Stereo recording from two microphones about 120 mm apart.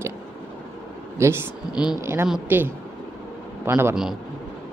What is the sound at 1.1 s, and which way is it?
Speech, 20° right (ahead or behind).